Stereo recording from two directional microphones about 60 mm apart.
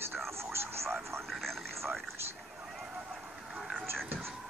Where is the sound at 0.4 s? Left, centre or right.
Right.